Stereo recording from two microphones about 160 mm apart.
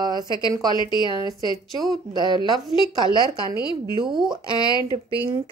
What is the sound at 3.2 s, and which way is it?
Speech, 25° right (ahead or behind).